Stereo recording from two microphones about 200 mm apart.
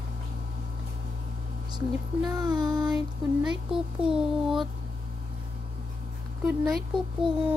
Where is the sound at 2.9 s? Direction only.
5° right (ahead or behind).